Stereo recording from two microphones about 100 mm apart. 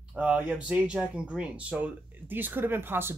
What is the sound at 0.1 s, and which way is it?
Speech, 10° right (ahead or behind).